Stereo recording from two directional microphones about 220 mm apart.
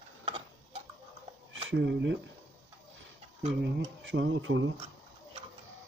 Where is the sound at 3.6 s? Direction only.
55° right (ahead or behind).